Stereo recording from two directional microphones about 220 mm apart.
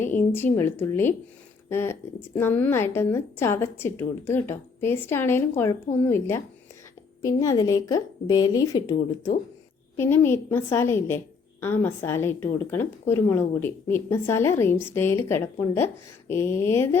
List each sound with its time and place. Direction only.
0.0 s a woman's voice: 10° left (ahead or behind)